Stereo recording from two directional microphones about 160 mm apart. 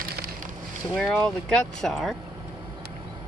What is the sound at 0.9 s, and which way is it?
Speech, centre (ahead or behind).